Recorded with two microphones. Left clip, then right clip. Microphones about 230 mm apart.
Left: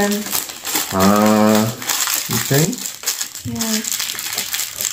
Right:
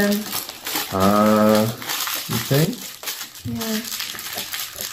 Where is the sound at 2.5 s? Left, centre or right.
Left.